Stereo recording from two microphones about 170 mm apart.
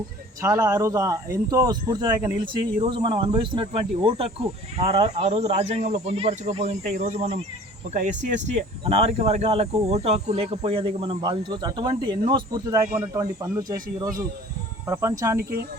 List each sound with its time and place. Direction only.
0.4 s speech: 15° right (ahead or behind); by 7.4 s 35° right (ahead or behind)
7.9 s speech: 45° right (ahead or behind); by 13.7 s 20° right (ahead or behind)
14.8 s speech: 15° right (ahead or behind)
15.4 s speech: 65° right (ahead or behind)